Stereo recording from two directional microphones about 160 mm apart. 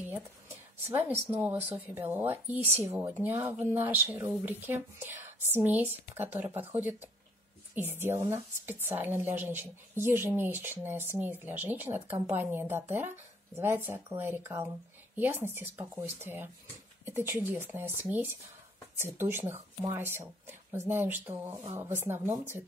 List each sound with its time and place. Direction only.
0.8 s speech: 10° right (ahead or behind)